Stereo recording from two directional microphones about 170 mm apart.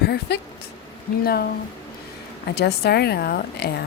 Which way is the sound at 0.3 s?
80° left.